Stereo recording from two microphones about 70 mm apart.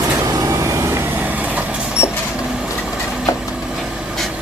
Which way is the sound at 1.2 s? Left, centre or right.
Right.